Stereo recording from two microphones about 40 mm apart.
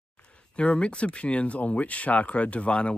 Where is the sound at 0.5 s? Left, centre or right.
Left.